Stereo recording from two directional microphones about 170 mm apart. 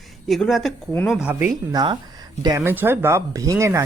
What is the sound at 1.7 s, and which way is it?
Speech, 25° right (ahead or behind).